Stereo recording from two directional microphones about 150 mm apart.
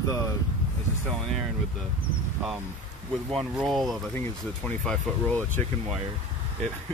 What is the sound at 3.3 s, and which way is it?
Speech, centre (ahead or behind).